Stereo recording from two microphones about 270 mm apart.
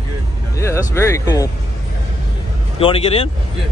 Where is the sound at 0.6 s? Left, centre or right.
Centre.